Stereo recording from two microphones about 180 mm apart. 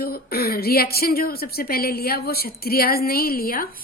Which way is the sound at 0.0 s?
55° left (ahead or behind).